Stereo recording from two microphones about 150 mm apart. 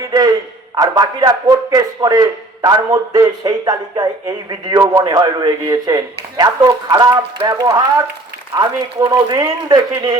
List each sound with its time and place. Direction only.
0.0 s a man's voice: 25° right (ahead or behind)